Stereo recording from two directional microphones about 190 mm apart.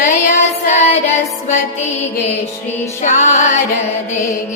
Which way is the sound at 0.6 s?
35° left (ahead or behind).